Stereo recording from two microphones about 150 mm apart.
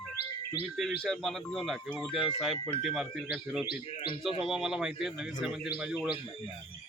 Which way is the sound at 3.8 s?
40° left (ahead or behind).